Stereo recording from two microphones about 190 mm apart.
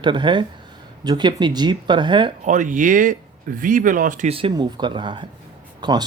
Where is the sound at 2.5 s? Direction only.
40° right (ahead or behind); by 6.0 s 20° right (ahead or behind).